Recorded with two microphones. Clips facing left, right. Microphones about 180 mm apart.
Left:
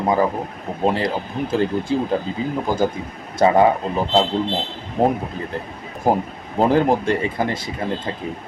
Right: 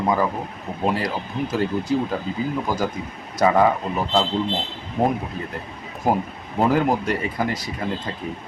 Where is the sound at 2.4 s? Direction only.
25° left (ahead or behind).